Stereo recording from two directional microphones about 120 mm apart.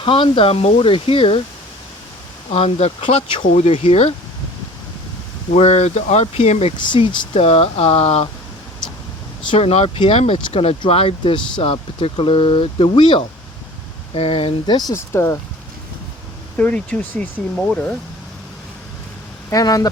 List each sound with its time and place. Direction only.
0.0 s speech: 45° left (ahead or behind)
2.5 s speech: 55° left (ahead or behind)
5.5 s speech: 65° left (ahead or behind)
6.7 s speech: 40° left (ahead or behind)
7.2 s speech: 55° left (ahead or behind)
9.5 s speech: 55° left (ahead or behind)
14.9 s speech: 20° left (ahead or behind)
16.6 s speech: 10° left (ahead or behind)
19.5 s speech: 30° left (ahead or behind)